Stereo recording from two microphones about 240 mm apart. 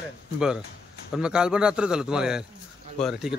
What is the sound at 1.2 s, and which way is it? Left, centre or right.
A man's voice, centre.